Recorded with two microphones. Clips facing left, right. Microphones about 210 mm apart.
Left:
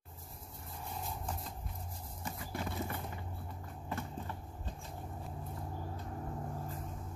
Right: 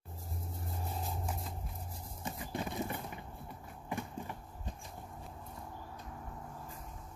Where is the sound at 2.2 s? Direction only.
20° right (ahead or behind).